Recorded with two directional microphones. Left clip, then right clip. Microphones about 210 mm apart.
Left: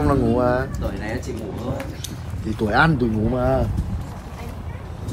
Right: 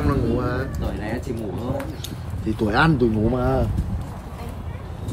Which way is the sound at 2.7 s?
10° right (ahead or behind).